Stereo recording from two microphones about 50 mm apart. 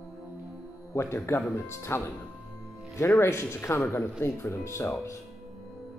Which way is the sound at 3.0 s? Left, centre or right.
Left.